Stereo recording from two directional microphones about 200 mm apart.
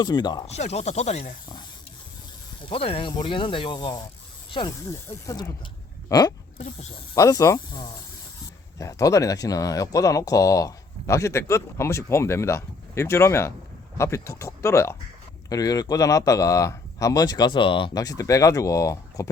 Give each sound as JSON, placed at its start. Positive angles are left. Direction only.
{"t": 0.0, "sound": "speech", "side_deg": 20}
{"t": 0.4, "sound": "speech", "side_deg": 35}
{"t": 2.6, "sound": "speech", "side_deg": 25}